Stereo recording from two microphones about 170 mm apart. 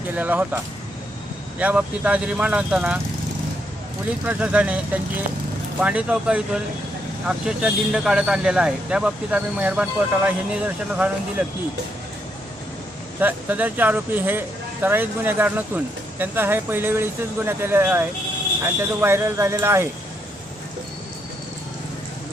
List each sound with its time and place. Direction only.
0.2 s speech: 10° right (ahead or behind)
4.3 s speech: 5° right (ahead or behind)
5.8 s speech: 10° right (ahead or behind)
13.1 s speech: 10° right (ahead or behind)